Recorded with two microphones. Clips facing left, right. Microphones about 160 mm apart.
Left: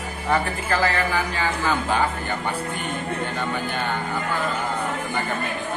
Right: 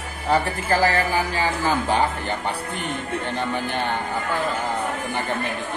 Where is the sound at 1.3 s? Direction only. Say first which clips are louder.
Right 1 dB; 35° right (ahead or behind).